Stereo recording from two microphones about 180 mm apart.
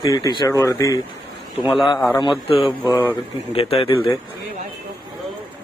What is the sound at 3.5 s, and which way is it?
Speech, 30° left (ahead or behind).